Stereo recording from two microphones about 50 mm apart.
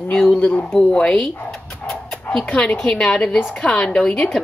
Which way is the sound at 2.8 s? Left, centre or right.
Centre.